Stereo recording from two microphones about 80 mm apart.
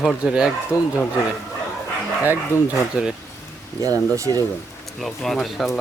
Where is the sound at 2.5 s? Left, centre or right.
Left.